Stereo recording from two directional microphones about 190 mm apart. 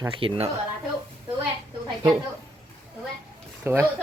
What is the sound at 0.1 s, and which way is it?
Speech, 30° right (ahead or behind).